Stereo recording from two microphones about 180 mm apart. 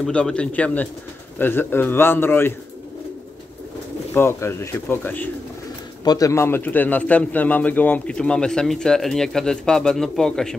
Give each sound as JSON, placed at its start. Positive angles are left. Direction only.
{"t": 0.0, "sound": "speech", "side_deg": 5}
{"t": 4.1, "sound": "speech", "side_deg": 15}